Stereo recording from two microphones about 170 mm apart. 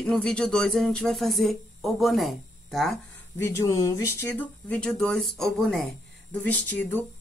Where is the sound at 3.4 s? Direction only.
15° left (ahead or behind).